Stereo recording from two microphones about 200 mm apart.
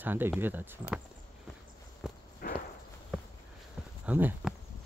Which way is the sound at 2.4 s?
45° left (ahead or behind).